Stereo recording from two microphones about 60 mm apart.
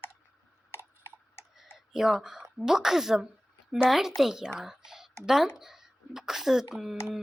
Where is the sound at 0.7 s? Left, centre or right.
Left.